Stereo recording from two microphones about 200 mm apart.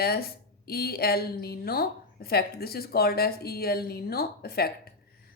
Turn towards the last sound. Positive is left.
turn(degrees=50)  # may be behind; listen again after turning